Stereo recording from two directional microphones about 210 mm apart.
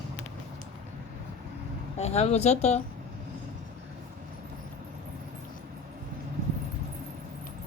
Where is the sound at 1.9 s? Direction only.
30° left (ahead or behind).